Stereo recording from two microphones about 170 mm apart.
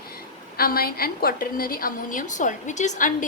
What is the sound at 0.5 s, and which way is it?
A woman's voice, 60° left (ahead or behind).